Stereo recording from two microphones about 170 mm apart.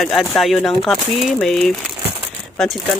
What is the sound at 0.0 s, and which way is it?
Speech, centre (ahead or behind).